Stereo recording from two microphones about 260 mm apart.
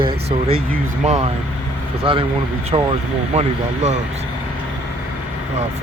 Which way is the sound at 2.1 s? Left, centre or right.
Right.